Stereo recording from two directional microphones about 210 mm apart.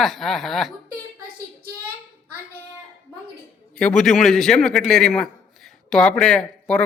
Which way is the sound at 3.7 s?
5° left (ahead or behind).